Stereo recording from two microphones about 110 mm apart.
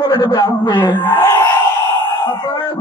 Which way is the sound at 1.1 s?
25° left (ahead or behind).